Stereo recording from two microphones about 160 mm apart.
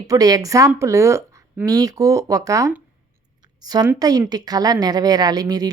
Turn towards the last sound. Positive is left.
turn(degrees=-25)  # may be behind; listen again after turning